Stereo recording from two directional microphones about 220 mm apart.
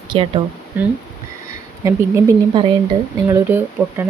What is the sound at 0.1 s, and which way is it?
Speech, 25° right (ahead or behind).